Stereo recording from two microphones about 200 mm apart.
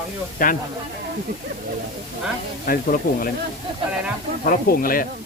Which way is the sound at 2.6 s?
45° left (ahead or behind).